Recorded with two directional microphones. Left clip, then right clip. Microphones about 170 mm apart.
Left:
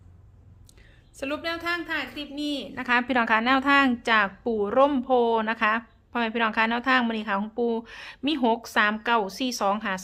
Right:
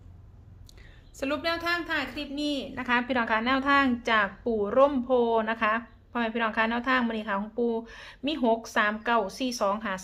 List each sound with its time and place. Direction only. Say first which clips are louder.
1.1 s a woman's voice: right 1 dB; 5° left (ahead or behind); by 10.0 s 25° left (ahead or behind)